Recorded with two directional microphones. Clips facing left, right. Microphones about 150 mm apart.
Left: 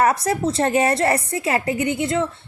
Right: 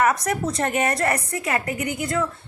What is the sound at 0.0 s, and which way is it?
A woman's voice, 30° left (ahead or behind).